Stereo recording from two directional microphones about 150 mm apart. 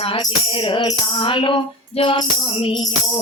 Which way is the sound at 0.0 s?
35° left (ahead or behind).